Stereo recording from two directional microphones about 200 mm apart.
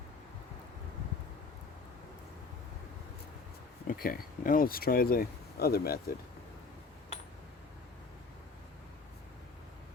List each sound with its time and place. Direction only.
3.8 s speech: 45° left (ahead or behind)